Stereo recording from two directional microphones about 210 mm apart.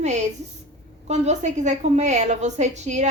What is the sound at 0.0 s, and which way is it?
A woman's voice, 35° right (ahead or behind).